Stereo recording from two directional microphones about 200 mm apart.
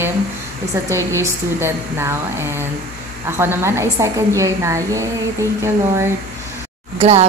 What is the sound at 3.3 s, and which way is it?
A woman's voice, 15° right (ahead or behind).